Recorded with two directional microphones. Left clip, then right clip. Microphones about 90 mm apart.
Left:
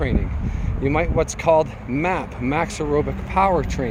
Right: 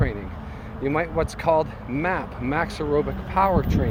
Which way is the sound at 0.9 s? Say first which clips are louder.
Left 3 dB; 30° left (ahead or behind).